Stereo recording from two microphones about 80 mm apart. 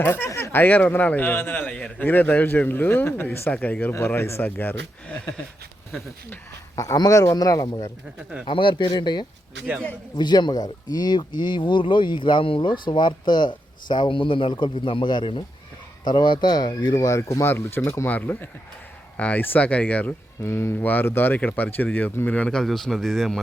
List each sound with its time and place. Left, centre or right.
0.0 s speech: left
6.7 s speech: left
8.4 s speech: left
16.0 s speech: left
17.2 s speech: left
17.5 s speech: left
20.4 s a man's voice: left; by 23.4 s centre